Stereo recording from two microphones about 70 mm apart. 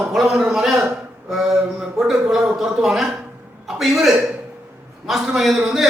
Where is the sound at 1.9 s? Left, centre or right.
Centre.